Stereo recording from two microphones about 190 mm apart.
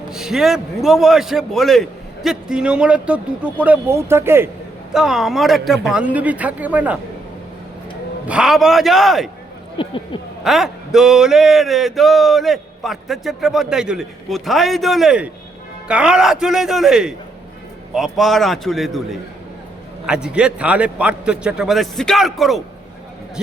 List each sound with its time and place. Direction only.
0.1 s speech: 5° right (ahead or behind)
4.9 s speech: centre (ahead or behind)
8.3 s speech: 5° right (ahead or behind)
9.7 s speech: 25° left (ahead or behind)
10.4 s speech: centre (ahead or behind)
20.1 s speech: 5° right (ahead or behind)